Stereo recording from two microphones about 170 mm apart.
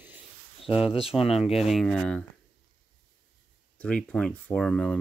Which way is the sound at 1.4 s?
Centre (ahead or behind).